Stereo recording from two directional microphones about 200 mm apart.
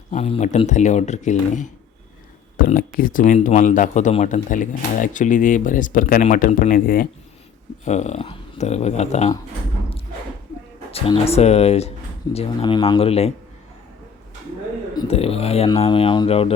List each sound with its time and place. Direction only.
0.1 s a man's voice: 30° left (ahead or behind)
7.9 s a man's voice: 35° left (ahead or behind)
10.9 s a man's voice: 30° left (ahead or behind)
14.9 s a man's voice: 30° left (ahead or behind)